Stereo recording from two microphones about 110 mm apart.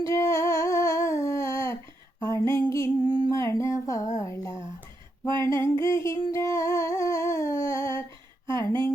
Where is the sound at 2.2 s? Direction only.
30° left (ahead or behind).